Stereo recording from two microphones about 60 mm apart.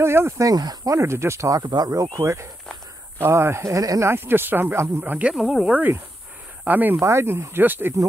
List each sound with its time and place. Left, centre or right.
0.0 s speech: right
0.4 s speech: right
3.2 s speech: right
3.7 s speech: right
4.0 s speech: right
5.3 s speech: centre
5.7 s speech: right
7.0 s speech: right
7.6 s speech: right